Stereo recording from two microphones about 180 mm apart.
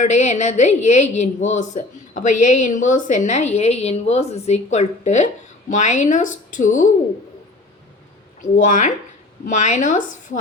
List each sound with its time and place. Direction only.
0.0 s a woman's voice: 40° left (ahead or behind)
8.4 s speech: 45° left (ahead or behind)